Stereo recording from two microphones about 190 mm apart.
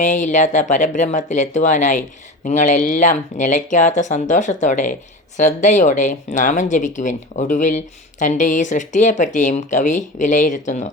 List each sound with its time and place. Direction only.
0.0 s speech: 40° left (ahead or behind)